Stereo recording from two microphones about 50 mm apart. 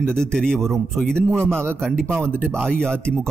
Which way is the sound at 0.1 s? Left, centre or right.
Centre.